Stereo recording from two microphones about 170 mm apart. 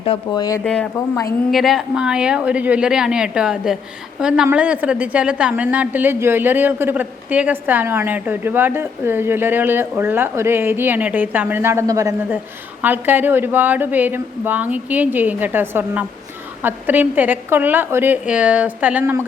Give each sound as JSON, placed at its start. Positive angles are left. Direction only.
{"t": 0.0, "sound": "speech", "side_deg": 30}
{"t": 0.6, "sound": "a woman's voice", "side_deg": 5}